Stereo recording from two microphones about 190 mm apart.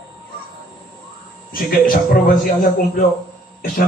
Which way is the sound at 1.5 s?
50° left (ahead or behind).